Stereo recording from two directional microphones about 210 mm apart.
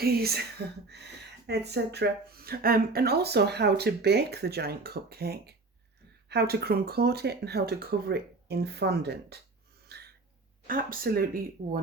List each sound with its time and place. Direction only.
0.0 s speech: 50° right (ahead or behind)
9.9 s a sound: 50° right (ahead or behind)
10.7 s speech: 40° right (ahead or behind)